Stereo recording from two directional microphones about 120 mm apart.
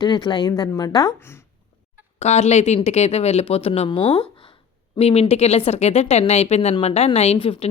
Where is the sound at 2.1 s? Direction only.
65° left (ahead or behind).